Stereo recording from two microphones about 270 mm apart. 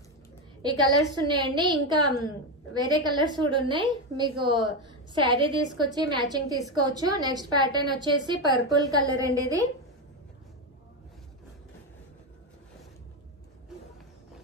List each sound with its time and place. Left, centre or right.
0.6 s a woman's voice: centre